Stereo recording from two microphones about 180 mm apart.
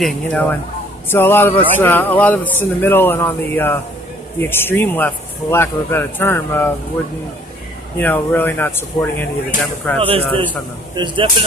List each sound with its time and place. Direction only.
0.0 s a man's voice: 10° left (ahead or behind)
8.0 s a man's voice: 10° left (ahead or behind)
9.9 s speech: 30° right (ahead or behind)